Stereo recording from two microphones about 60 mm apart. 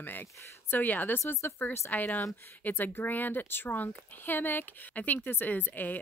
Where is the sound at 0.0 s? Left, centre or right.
Left.